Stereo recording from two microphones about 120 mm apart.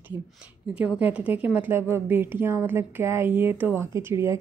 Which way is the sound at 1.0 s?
10° right (ahead or behind).